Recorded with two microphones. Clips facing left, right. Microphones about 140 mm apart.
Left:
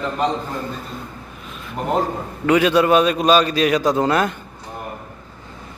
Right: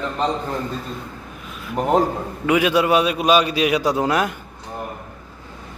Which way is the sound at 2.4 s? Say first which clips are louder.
Left 2 dB; 10° right (ahead or behind).